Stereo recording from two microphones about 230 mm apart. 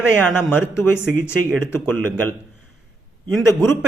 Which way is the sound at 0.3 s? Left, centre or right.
Centre.